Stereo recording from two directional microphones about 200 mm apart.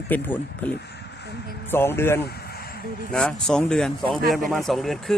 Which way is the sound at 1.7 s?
10° left (ahead or behind).